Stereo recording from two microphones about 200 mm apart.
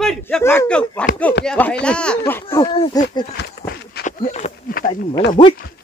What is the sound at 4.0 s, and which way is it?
Speech, 35° left (ahead or behind).